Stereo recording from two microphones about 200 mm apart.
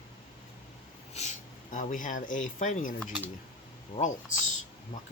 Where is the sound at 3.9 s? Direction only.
40° left (ahead or behind).